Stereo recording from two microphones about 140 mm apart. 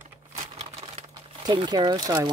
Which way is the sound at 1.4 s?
30° right (ahead or behind).